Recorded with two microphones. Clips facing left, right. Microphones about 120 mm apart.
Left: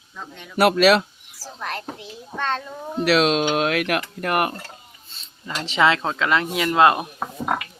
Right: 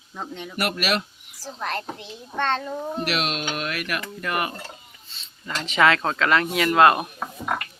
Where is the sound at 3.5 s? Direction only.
90° left; by 4.5 s 60° left (ahead or behind).